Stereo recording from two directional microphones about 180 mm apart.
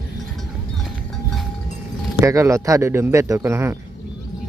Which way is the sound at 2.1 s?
15° right (ahead or behind).